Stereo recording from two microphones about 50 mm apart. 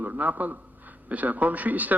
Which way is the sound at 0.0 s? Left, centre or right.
Right.